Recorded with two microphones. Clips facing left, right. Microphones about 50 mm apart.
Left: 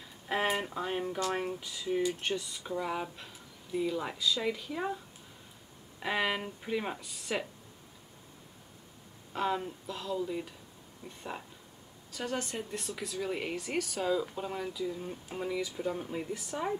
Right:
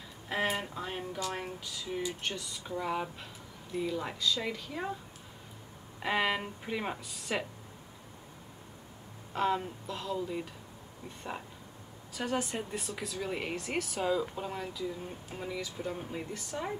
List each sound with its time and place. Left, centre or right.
0.3 s speech: centre
2.6 s speech: centre
5.9 s speech: centre
9.3 s speech: centre
15.3 s speech: centre